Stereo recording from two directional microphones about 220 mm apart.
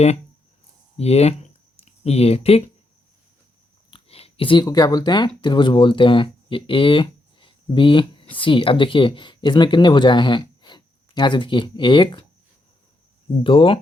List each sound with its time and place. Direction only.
0.9 s speech: 30° left (ahead or behind)
3.9 s speech: 25° left (ahead or behind)
13.4 s speech: 25° left (ahead or behind)